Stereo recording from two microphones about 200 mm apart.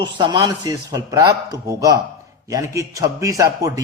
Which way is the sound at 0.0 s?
20° right (ahead or behind).